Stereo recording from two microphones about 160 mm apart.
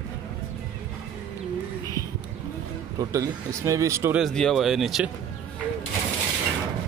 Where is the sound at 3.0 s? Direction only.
20° right (ahead or behind).